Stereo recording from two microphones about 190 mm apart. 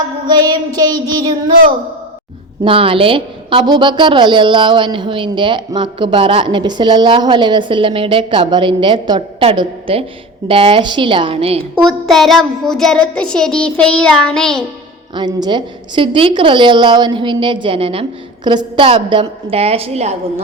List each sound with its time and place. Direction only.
0.3 s a woman's voice: 20° right (ahead or behind)
2.6 s a woman's voice: 30° right (ahead or behind)
11.9 s child singing: centre (ahead or behind)
15.1 s a woman's voice: 20° right (ahead or behind)